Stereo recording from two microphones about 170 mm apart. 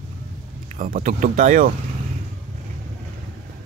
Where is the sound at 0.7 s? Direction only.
50° right (ahead or behind).